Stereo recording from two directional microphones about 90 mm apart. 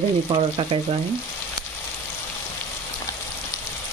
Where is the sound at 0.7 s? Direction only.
90° right.